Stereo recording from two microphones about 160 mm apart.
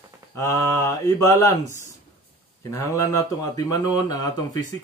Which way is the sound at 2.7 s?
20° left (ahead or behind).